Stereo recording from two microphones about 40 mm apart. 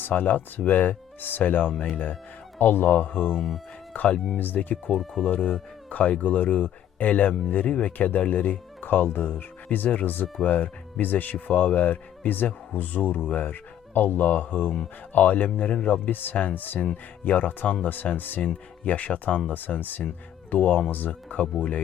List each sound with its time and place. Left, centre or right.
0.1 s speech: left
4.4 s speech: left
5.2 s speech: left
5.9 s speech: left
9.7 s speech: left